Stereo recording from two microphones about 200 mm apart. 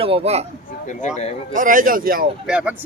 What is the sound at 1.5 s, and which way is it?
Speech, 45° right (ahead or behind).